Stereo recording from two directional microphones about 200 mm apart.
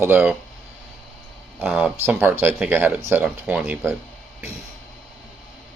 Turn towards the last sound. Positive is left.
turn(degrees=-10)  # may be behind; listen again after turning